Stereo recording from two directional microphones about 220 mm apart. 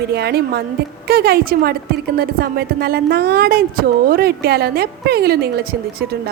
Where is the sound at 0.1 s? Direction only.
50° right (ahead or behind).